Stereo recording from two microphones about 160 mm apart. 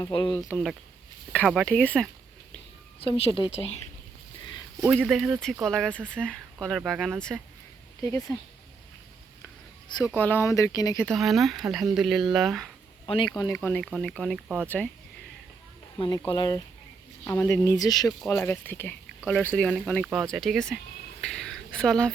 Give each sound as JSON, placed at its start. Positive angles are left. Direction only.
{"t": 0.0, "sound": "speech", "side_deg": 30}
{"t": 0.3, "sound": "speech", "side_deg": 15}
{"t": 3.0, "sound": "a woman's voice", "side_deg": 35}
{"t": 4.9, "sound": "speech", "side_deg": 0}
{"t": 8.0, "sound": "speech", "side_deg": 20}
{"t": 10.2, "sound": "speech", "side_deg": 10}
{"t": 11.0, "sound": "speech", "side_deg": 0}
{"t": 13.1, "sound": "speech", "side_deg": 30}
{"t": 13.5, "sound": "speech", "side_deg": 10}
{"t": 14.6, "sound": "speech", "side_deg": 10}
{"t": 16.0, "sound": "speech", "side_deg": 25}
{"t": 17.2, "sound": "speech", "side_deg": 15}
{"t": 18.3, "sound": "speech", "side_deg": 10}
{"t": 21.2, "sound": "a sound", "side_deg": 5}